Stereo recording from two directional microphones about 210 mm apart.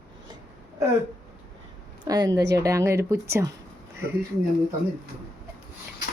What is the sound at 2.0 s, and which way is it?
Speech, 20° right (ahead or behind).